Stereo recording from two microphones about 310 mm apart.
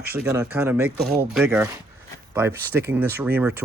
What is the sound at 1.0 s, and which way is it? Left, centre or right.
Speech, right.